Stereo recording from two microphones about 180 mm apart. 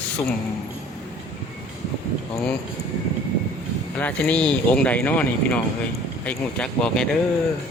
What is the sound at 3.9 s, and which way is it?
Speech, 10° left (ahead or behind).